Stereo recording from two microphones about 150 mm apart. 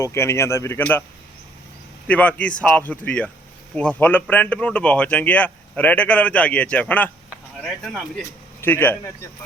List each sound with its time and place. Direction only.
0.0 s speech: 20° left (ahead or behind)
2.0 s speech: 10° left (ahead or behind)